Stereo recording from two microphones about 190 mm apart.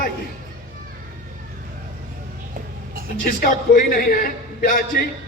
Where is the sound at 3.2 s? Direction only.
50° left (ahead or behind).